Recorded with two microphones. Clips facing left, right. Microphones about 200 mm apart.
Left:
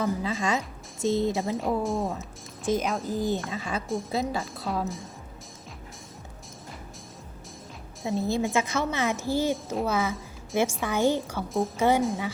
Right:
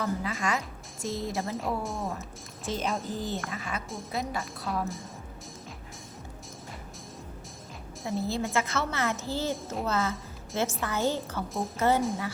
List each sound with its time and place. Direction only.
0.0 s speech: 25° left (ahead or behind)
1.5 s speech: centre (ahead or behind)
3.2 s speech: 15° left (ahead or behind)
4.7 s speech: centre (ahead or behind)
8.0 s a woman's voice: 15° left (ahead or behind)
11.4 s speech: centre (ahead or behind)
11.8 s a woman's voice: 15° left (ahead or behind)